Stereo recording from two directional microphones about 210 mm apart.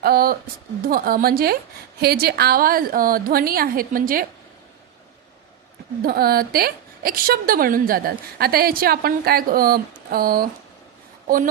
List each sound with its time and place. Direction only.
0.0 s a woman's voice: 45° right (ahead or behind)
6.0 s a woman's voice: 45° right (ahead or behind)